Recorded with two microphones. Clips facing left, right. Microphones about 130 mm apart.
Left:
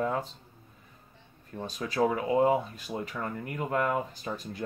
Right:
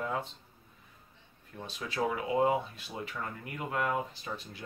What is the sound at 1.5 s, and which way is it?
Speech, 40° left (ahead or behind).